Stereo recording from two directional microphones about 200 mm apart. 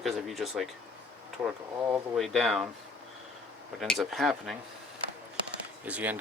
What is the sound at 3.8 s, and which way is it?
Speech, centre (ahead or behind).